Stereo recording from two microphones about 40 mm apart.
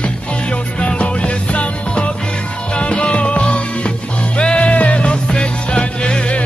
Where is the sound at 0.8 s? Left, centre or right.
Left.